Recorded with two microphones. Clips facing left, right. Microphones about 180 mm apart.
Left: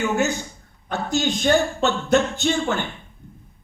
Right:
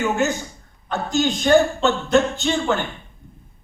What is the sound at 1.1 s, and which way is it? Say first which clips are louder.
A man's voice: right 3 dB; 50° right (ahead or behind).